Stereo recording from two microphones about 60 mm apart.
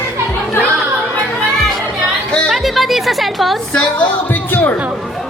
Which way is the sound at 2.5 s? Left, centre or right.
Centre.